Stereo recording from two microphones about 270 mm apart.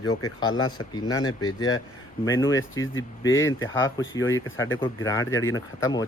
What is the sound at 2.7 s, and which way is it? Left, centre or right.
Speech, left.